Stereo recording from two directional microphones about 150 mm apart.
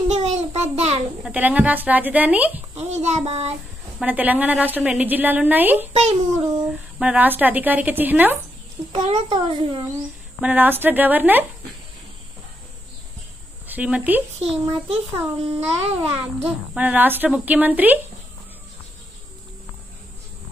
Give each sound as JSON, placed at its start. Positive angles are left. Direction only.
{"t": 0.1, "sound": "child singing", "side_deg": -50}
{"t": 1.2, "sound": "a woman's voice", "side_deg": -10}
{"t": 2.7, "sound": "a child's voice", "side_deg": -45}
{"t": 4.0, "sound": "a woman's voice", "side_deg": -10}
{"t": 7.0, "sound": "a woman's voice", "side_deg": -10}
{"t": 8.9, "sound": "a child's voice", "side_deg": -45}
{"t": 10.4, "sound": "a woman's voice", "side_deg": -10}
{"t": 13.7, "sound": "speech", "side_deg": -10}
{"t": 14.4, "sound": "a child's voice", "side_deg": -40}
{"t": 16.7, "sound": "a woman's voice", "side_deg": -10}